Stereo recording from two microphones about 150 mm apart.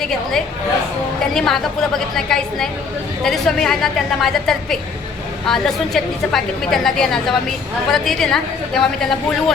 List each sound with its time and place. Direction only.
0.0 s a woman's voice: 5° left (ahead or behind)